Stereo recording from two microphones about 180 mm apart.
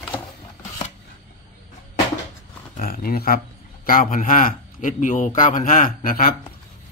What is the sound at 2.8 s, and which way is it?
A man's voice, 55° left (ahead or behind).